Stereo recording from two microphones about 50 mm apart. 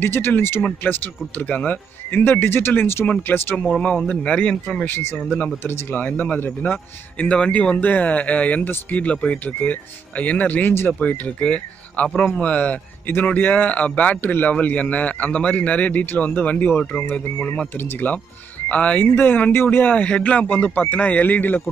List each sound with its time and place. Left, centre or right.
0.0 s speech: left
1.5 s speech: left
3.3 s speech: left
3.7 s speech: centre
5.9 s speech: left; by 7.7 s centre
7.7 s speech: left
18.7 s speech: left
19.0 s speech: left